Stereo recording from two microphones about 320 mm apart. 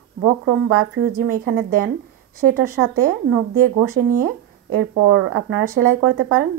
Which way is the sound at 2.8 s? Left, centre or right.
Right.